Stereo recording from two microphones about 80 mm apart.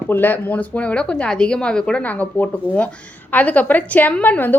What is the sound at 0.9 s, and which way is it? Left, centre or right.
A woman's voice, centre.